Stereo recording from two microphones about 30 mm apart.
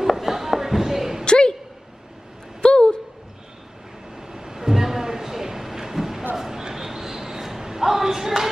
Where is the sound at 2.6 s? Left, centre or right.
Left.